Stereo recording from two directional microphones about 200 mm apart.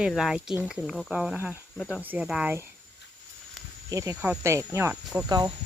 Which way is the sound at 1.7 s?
10° left (ahead or behind).